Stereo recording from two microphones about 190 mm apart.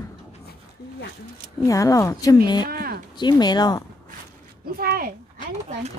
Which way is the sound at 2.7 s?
50° right (ahead or behind).